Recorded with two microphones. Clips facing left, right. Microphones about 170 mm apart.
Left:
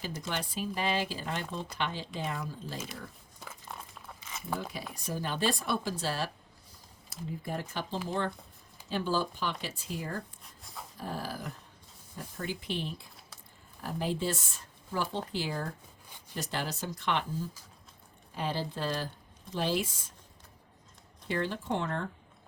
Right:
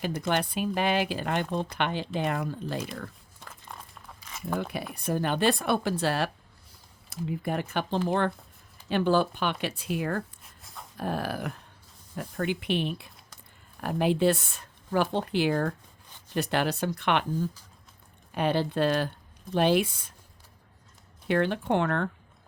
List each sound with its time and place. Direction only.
0.0 s speech: 60° right (ahead or behind)
3.4 s a sound: 5° left (ahead or behind)
4.9 s speech: 60° right (ahead or behind)
10.4 s dog: centre (ahead or behind)
10.9 s speech: 65° right (ahead or behind)
18.3 s speech: 65° right (ahead or behind)
21.2 s speech: 65° right (ahead or behind)